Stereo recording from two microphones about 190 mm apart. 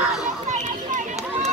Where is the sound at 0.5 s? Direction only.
40° right (ahead or behind).